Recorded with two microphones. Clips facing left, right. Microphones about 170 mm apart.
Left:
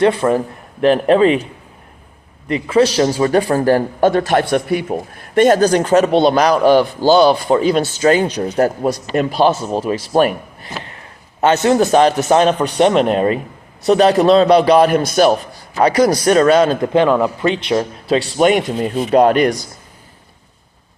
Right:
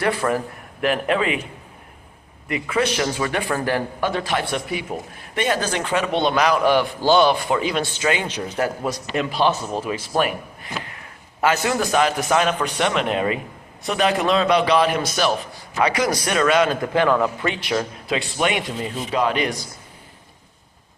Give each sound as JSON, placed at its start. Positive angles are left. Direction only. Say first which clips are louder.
{"t": 0.0, "sound": "speech", "louder": "left 8 dB", "side_deg": 25}
{"t": 2.5, "sound": "speech", "louder": "left 8 dB", "side_deg": 30}
{"t": 15.7, "sound": "speech", "louder": "left 8 dB", "side_deg": 40}